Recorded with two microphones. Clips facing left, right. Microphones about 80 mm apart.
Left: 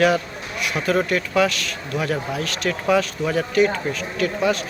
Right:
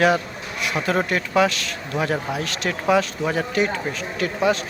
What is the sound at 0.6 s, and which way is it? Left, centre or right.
A man's voice, right.